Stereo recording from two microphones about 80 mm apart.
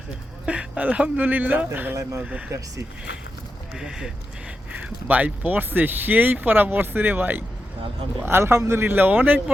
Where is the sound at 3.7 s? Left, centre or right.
Centre.